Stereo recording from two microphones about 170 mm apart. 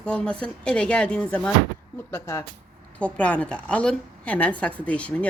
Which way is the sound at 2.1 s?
15° left (ahead or behind).